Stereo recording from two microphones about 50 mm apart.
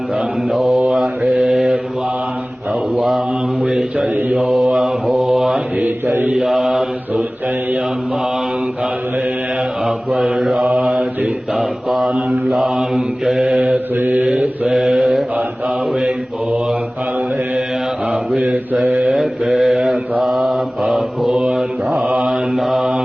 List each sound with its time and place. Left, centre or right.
0.5 s mantra: centre
2.9 s mantra: centre
4.1 s mantra: right
4.4 s mantra: centre
9.8 s mantra: centre
13.7 s mantra: right
14.7 s mantra: centre
16.0 s mantra: centre
19.0 s mantra: centre